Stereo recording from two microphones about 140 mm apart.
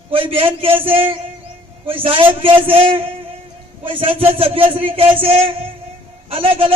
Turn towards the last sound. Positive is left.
turn(degrees=-40)  # may be behind; listen again after turning